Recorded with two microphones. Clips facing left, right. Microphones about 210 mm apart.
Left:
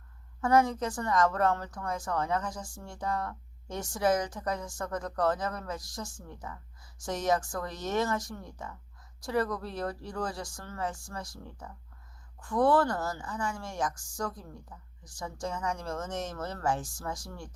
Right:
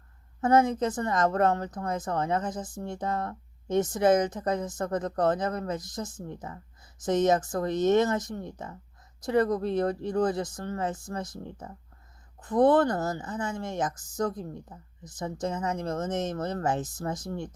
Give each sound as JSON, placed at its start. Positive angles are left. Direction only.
{"t": 0.4, "sound": "speech", "side_deg": -20}